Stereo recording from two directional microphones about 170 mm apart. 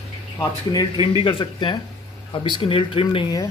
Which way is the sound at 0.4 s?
20° left (ahead or behind).